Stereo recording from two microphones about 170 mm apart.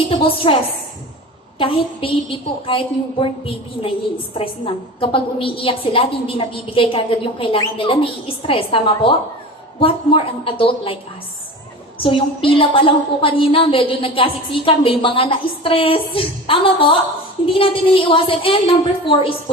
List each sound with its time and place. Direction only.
0.1 s a woman's voice: 30° left (ahead or behind)
11.9 s a woman's voice: 30° left (ahead or behind)